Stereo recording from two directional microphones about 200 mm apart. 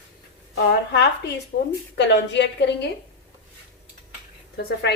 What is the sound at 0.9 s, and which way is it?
Speech, 60° left (ahead or behind).